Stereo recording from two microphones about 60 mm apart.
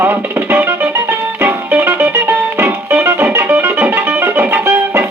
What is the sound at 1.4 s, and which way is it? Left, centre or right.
Music, right.